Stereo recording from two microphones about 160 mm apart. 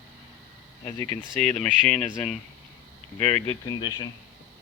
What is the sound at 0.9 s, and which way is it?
Speech, 20° left (ahead or behind).